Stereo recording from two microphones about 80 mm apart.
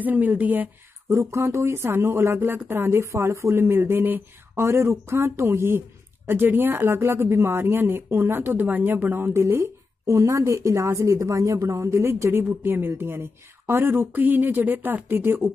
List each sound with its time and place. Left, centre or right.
0.0 s a woman's voice: right
1.0 s a woman's voice: right